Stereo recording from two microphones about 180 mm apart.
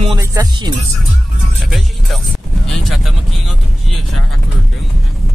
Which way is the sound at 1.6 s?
Centre (ahead or behind).